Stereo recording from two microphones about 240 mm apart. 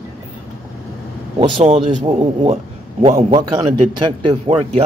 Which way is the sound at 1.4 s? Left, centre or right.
Right.